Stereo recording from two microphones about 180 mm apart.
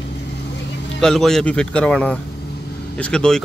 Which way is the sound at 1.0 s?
Centre (ahead or behind).